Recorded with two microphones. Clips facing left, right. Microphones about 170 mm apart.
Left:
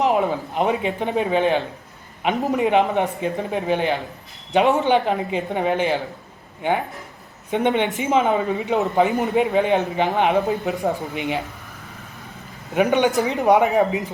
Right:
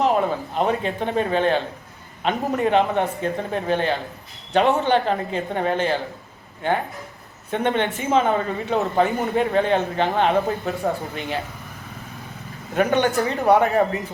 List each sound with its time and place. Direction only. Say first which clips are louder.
0.0 s speech: left 1 dB; 15° left (ahead or behind)
12.7 s speech: left 1 dB; 15° left (ahead or behind)